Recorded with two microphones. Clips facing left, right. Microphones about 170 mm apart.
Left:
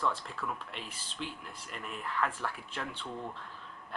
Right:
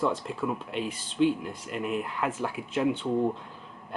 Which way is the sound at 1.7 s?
10° right (ahead or behind).